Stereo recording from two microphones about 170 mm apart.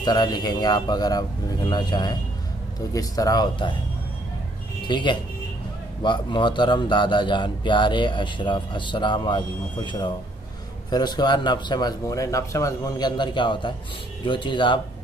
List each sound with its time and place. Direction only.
0.0 s speech: 25° left (ahead or behind)
4.8 s speech: 25° left (ahead or behind)